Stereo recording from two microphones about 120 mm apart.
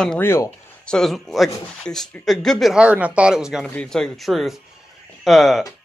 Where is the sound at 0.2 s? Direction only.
20° left (ahead or behind).